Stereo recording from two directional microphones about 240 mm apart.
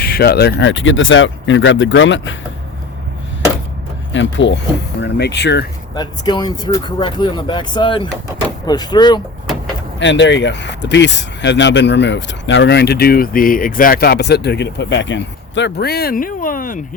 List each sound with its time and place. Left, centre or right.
0.0 s speech: left
4.1 s speech: left
5.9 s speech: centre
10.0 s speech: left